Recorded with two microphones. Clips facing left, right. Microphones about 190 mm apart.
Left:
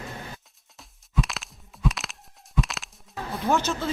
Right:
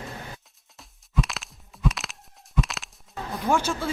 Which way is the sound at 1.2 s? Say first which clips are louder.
Even; centre (ahead or behind).